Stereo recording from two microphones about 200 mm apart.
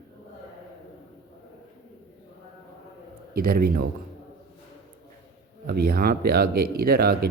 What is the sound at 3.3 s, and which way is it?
Speech, 45° right (ahead or behind).